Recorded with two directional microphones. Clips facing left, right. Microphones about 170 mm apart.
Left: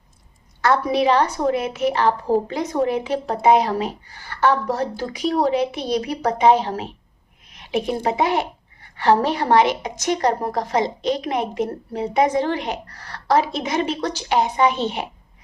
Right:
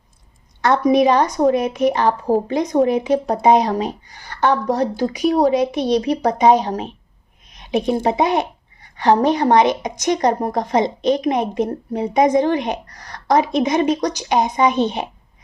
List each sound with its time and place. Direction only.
0.6 s a woman's voice: 20° right (ahead or behind)